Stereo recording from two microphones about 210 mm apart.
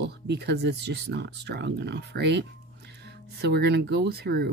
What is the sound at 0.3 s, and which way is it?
Speech, 55° right (ahead or behind).